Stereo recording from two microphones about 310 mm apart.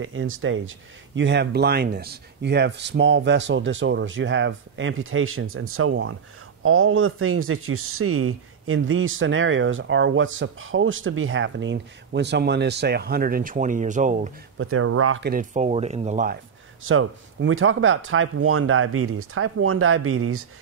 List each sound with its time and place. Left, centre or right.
0.0 s speech: right
14.6 s speech: right
15.2 s speech: right
16.8 s speech: right